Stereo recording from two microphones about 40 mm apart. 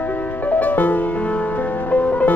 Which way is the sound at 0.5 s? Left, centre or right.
Left.